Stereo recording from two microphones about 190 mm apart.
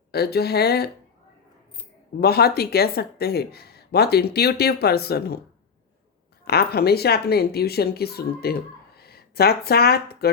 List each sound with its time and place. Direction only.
0.1 s speech: 55° left (ahead or behind)
2.2 s speech: 55° left (ahead or behind)
6.4 s speech: 55° left (ahead or behind)